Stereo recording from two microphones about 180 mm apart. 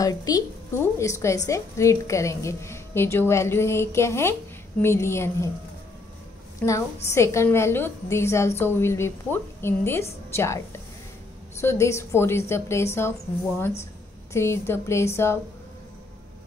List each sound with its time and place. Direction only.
0.0 s a woman's voice: 20° left (ahead or behind)
6.6 s a woman's voice: 10° left (ahead or behind)
14.3 s a woman's voice: 15° left (ahead or behind)